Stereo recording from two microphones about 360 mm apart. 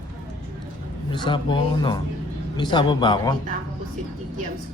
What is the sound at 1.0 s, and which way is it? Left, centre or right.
Speech, centre.